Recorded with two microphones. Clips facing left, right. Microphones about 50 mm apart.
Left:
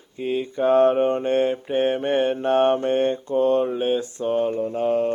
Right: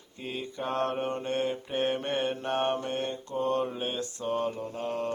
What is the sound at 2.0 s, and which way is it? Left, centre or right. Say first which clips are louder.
Mantra: left 9 dB; left.